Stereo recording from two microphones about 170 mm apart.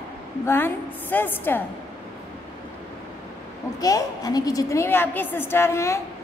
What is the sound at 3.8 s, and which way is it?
A woman's voice, 20° left (ahead or behind).